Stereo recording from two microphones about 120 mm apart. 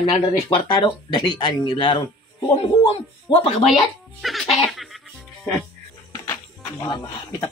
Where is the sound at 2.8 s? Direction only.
50° left (ahead or behind).